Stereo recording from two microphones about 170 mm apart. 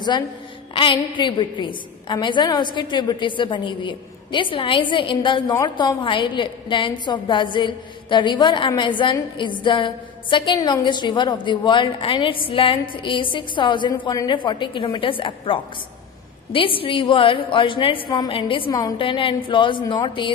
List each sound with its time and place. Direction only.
0.7 s a woman's voice: 30° left (ahead or behind)